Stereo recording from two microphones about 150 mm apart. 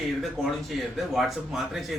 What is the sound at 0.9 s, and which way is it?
Speech, centre (ahead or behind).